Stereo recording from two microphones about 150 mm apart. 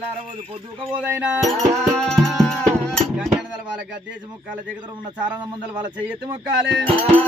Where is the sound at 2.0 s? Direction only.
5° left (ahead or behind).